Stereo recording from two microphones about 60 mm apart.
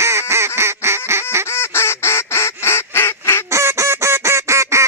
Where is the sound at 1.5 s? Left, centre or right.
Left.